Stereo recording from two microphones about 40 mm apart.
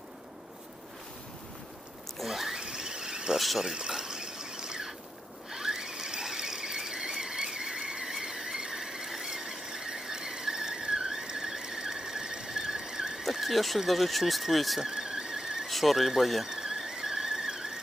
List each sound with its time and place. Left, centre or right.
2.1 s a sound: centre
2.6 s cricket: centre
3.3 s a sound: centre
3.6 s water: centre
5.5 s squeal: centre
13.3 s speech: centre
14.8 s a sound: centre
15.6 s speech: centre
16.5 s squeal: centre